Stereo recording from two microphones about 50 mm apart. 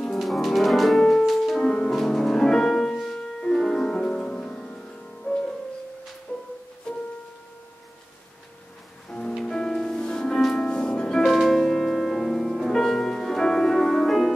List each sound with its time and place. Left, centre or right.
0.1 s music: centre
6.3 s music: left
9.4 s music: centre
11.2 s music: centre